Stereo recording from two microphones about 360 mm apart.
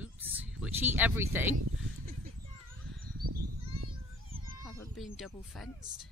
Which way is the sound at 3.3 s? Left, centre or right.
Right.